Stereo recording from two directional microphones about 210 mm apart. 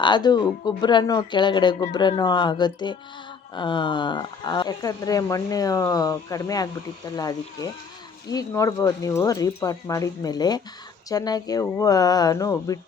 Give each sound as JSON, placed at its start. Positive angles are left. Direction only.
{"t": 0.0, "sound": "speech", "side_deg": 20}